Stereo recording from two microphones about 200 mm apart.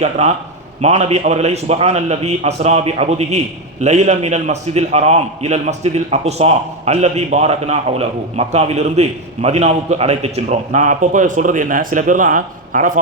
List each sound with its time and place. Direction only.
0.0 s a man's voice: 35° right (ahead or behind)